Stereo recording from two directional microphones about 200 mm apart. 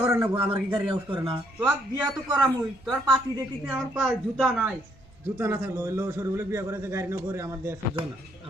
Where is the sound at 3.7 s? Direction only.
5° right (ahead or behind).